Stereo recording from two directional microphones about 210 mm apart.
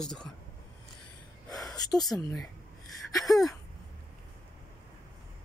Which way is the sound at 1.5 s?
Centre (ahead or behind).